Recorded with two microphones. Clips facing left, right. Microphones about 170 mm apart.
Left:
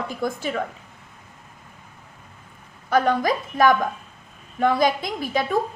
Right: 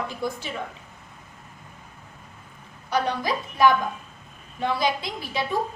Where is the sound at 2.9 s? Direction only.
50° left (ahead or behind).